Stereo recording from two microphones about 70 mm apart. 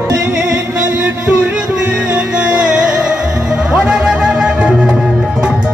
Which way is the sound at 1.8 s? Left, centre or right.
Centre.